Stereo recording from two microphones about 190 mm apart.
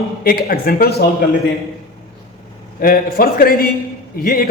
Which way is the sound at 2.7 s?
50° left (ahead or behind).